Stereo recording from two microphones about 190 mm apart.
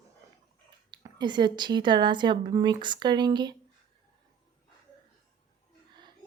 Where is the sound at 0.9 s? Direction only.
25° right (ahead or behind).